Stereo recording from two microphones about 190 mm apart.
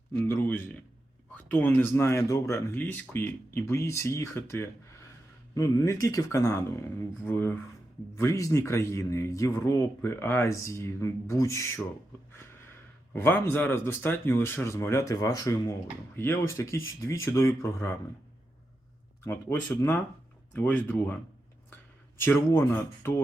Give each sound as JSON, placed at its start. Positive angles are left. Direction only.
{"t": 0.1, "sound": "speech", "side_deg": 15}
{"t": 13.1, "sound": "speech", "side_deg": 10}
{"t": 19.2, "sound": "speech", "side_deg": 10}
{"t": 22.2, "sound": "speech", "side_deg": 10}